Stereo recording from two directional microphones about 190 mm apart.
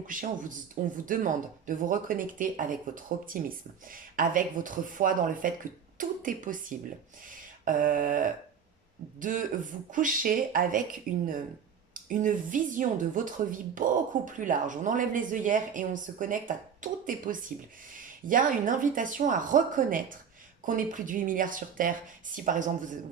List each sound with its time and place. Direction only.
0.1 s a woman's voice: 45° right (ahead or behind)